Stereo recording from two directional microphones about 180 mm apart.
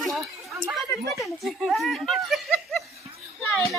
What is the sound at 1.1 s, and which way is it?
Speech, centre (ahead or behind).